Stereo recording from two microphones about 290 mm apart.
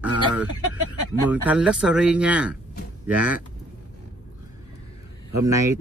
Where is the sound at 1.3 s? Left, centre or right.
Centre.